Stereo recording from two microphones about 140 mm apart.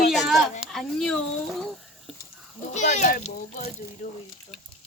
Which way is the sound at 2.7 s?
55° left (ahead or behind).